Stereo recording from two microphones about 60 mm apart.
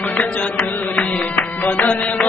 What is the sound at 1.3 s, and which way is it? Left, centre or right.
Music, left.